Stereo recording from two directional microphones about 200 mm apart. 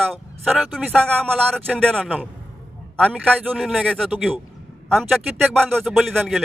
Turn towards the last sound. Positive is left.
turn(degrees=0)  # may be behind; listen again after turning